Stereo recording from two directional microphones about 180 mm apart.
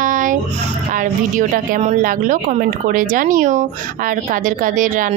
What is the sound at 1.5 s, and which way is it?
Speech, 45° right (ahead or behind).